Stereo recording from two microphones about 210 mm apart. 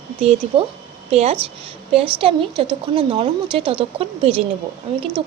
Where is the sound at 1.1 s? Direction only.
30° right (ahead or behind).